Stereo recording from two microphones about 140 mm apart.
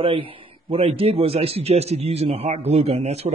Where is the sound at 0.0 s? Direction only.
40° right (ahead or behind).